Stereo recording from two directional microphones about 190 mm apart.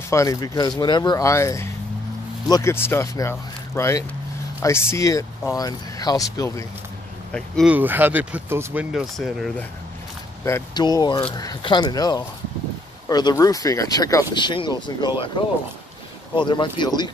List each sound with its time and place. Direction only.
0.1 s speech: 15° left (ahead or behind)
7.3 s speech: 5° left (ahead or behind)
7.7 s speech: 10° right (ahead or behind)
10.4 s speech: 20° left (ahead or behind)
16.3 s speech: 25° left (ahead or behind)